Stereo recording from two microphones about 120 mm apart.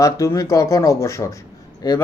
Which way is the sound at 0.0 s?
25° left (ahead or behind).